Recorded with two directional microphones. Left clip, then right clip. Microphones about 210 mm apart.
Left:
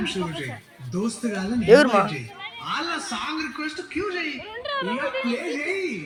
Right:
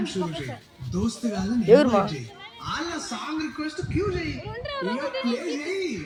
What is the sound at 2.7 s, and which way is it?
A man's voice, 45° right (ahead or behind).